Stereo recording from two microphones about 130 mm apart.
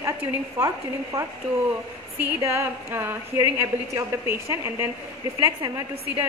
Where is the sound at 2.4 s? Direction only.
20° right (ahead or behind).